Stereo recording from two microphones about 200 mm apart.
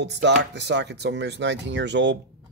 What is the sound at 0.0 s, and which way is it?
Speech, 60° right (ahead or behind).